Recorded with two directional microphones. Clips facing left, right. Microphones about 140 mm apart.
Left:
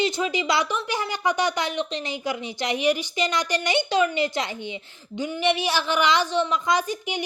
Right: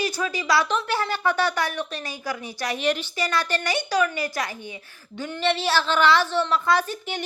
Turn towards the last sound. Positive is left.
turn(degrees=15)  # may be behind; listen again after turning